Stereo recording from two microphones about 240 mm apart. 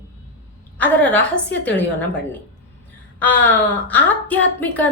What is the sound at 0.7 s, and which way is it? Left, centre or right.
Speech, centre.